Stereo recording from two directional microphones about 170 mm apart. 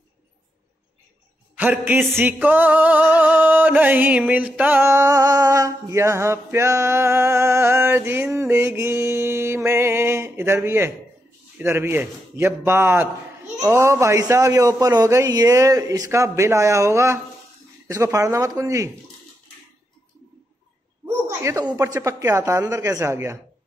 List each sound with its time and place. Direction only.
1.6 s music: 10° right (ahead or behind)
17.8 s speech: 20° right (ahead or behind)
21.4 s music: 20° right (ahead or behind)